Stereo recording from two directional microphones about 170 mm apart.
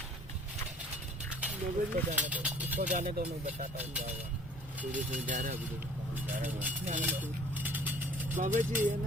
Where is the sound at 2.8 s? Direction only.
45° right (ahead or behind).